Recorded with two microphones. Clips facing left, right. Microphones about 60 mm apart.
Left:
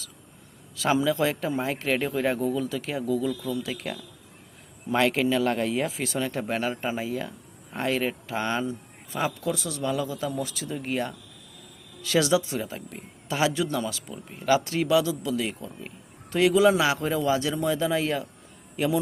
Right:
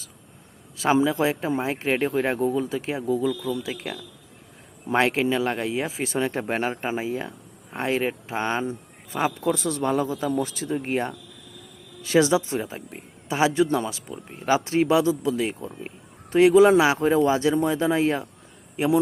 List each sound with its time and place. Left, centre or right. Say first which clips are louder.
0.9 s a man's voice: right 2 dB; right
3.4 s a man's voice: right 2 dB; right
4.9 s a man's voice: right 2 dB; right
9.4 s a man's voice: right 5 dB; right